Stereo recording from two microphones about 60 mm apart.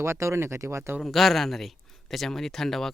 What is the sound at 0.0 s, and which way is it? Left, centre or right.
Speech, right.